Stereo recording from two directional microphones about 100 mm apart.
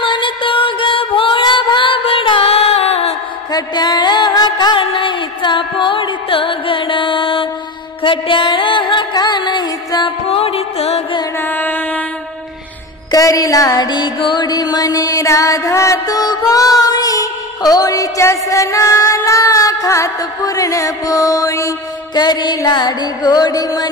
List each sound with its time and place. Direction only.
0.0 s music: 55° left (ahead or behind); by 3.2 s 85° left
3.5 s music: 45° left (ahead or behind)
10.0 s music: 75° left (ahead or behind)
11.3 s music: 20° left (ahead or behind)
13.1 s music: 35° left (ahead or behind)